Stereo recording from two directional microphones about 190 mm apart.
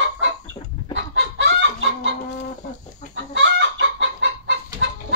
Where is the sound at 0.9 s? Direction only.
75° right (ahead or behind).